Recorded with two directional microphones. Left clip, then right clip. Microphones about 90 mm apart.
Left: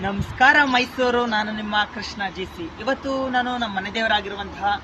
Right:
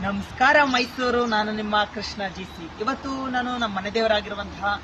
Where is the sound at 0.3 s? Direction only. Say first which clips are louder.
Left 2 dB; 15° right (ahead or behind).